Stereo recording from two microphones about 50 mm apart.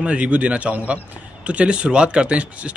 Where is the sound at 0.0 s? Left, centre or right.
Right.